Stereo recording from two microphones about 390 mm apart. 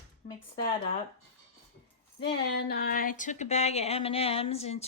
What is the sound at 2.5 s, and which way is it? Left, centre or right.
Speech, left.